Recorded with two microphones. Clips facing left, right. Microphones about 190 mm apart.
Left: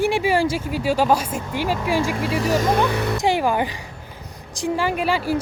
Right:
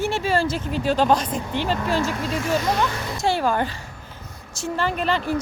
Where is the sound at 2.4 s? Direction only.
40° left (ahead or behind); by 3.2 s 60° left (ahead or behind).